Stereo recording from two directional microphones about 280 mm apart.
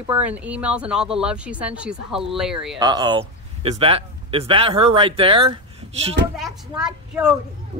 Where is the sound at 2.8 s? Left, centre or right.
Centre.